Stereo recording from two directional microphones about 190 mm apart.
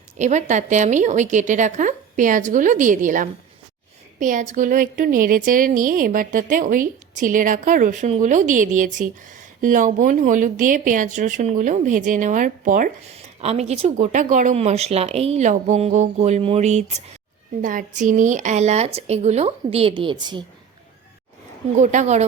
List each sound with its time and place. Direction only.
0.2 s a woman's voice: 40° right (ahead or behind)
13.1 s speech: 35° right (ahead or behind)
21.8 s speech: 40° right (ahead or behind)